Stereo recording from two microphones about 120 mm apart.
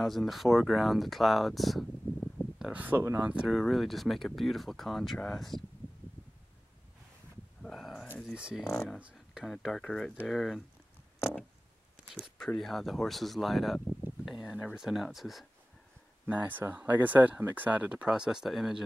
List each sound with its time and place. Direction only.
0.0 s speech: centre (ahead or behind)
3.4 s speech: centre (ahead or behind)
7.6 s a sound: centre (ahead or behind)
8.2 s speech: 5° right (ahead or behind)
8.7 s speech: 10° left (ahead or behind)
12.1 s speech: centre (ahead or behind)
16.3 s speech: 15° right (ahead or behind)